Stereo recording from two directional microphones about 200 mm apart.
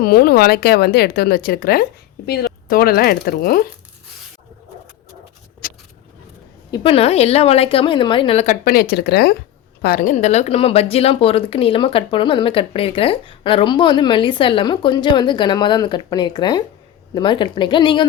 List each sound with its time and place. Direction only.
0.0 s speech: 50° left (ahead or behind)
5.6 s vehicle: 45° left (ahead or behind)
6.7 s speech: 30° left (ahead or behind)
8.6 s speech: 50° left (ahead or behind); by 18.0 s 25° left (ahead or behind)